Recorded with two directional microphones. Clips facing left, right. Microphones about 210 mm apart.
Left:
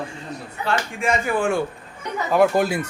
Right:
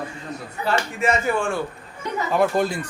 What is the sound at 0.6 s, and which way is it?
Speech, 5° right (ahead or behind).